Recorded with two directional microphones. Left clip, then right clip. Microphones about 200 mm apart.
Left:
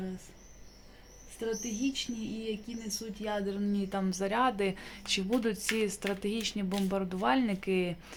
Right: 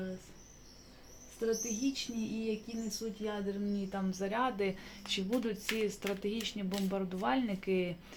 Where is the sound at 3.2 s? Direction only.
45° left (ahead or behind).